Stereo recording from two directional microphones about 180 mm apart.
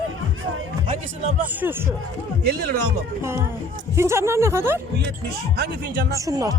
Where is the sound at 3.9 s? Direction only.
15° right (ahead or behind).